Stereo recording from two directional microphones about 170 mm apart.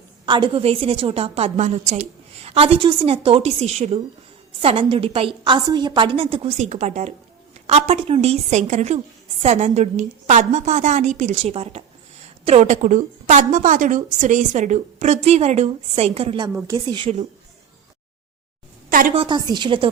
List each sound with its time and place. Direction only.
0.3 s a woman's voice: 30° right (ahead or behind)
16.6 s a woman's voice: 20° right (ahead or behind)
18.9 s a sound: 55° right (ahead or behind)
19.1 s a woman's voice: 30° right (ahead or behind)